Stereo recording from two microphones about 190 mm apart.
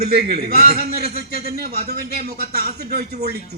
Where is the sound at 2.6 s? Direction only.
55° right (ahead or behind).